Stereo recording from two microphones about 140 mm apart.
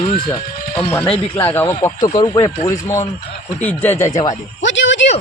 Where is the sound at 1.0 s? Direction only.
40° left (ahead or behind).